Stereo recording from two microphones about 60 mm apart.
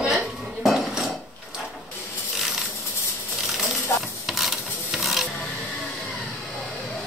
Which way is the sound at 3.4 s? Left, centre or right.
Centre.